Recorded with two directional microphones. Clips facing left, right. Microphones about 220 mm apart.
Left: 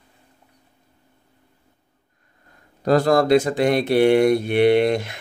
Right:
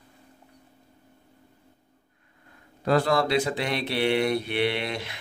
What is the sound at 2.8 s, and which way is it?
Speech, 40° left (ahead or behind).